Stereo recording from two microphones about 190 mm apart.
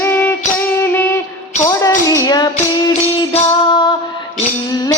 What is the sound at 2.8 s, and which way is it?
Music, 30° left (ahead or behind).